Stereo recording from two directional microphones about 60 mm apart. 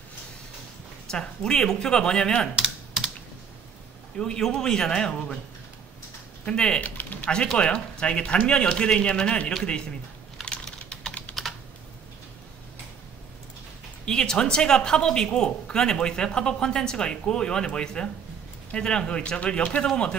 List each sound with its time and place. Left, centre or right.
1.1 s speech: centre
2.5 s typing: centre
4.2 s speech: centre
6.4 s speech: centre
6.8 s typing: left
7.5 s speech: centre
10.4 s typing: centre
11.4 s computer keyboard: centre
14.0 s speech: centre